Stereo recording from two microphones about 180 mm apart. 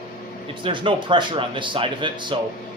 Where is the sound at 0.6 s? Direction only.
30° right (ahead or behind).